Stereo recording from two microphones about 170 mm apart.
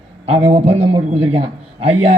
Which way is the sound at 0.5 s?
40° right (ahead or behind).